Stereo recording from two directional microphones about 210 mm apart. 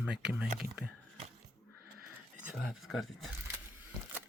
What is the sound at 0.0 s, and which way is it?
Speech, 5° right (ahead or behind).